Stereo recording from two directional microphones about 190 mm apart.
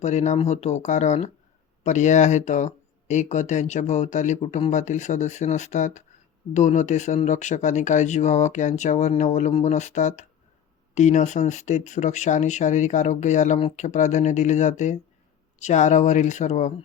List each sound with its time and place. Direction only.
0.0 s speech: 35° left (ahead or behind)